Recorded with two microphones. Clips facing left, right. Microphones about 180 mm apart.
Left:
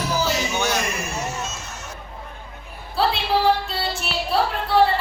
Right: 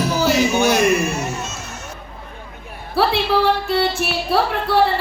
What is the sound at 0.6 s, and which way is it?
Speech, 10° right (ahead or behind).